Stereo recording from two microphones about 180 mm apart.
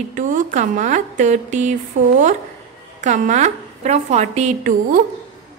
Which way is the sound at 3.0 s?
40° right (ahead or behind).